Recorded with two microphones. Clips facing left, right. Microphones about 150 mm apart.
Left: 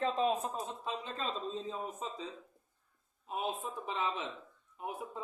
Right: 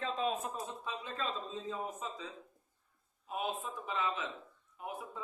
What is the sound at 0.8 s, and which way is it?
Speech, 30° left (ahead or behind).